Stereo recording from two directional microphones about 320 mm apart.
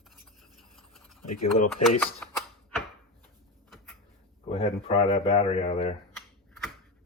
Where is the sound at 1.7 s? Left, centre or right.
Centre.